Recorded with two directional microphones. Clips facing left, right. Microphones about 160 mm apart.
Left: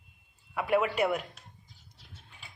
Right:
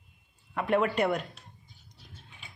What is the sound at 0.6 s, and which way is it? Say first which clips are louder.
Speech: right 1 dB; 5° left (ahead or behind).